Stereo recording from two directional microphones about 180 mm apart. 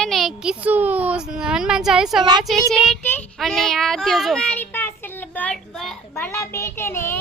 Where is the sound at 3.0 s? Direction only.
5° left (ahead or behind).